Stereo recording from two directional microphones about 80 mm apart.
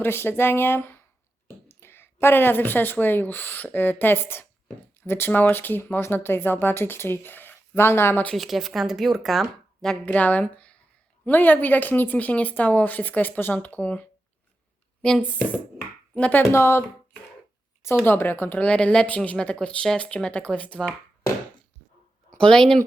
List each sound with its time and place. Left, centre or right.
0.0 s speech: left
8.4 s speech: centre
10.2 s speech: centre
16.5 s speech: left
18.0 s speech: left
18.7 s speech: centre
22.4 s speech: centre